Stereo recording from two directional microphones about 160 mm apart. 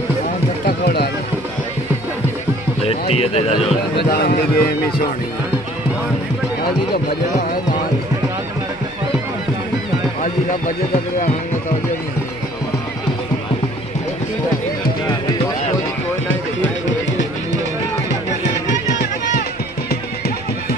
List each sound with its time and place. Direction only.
0.7 s a sound: 90° left
2.8 s speech: 40° left (ahead or behind)
4.1 s speech: 70° left (ahead or behind)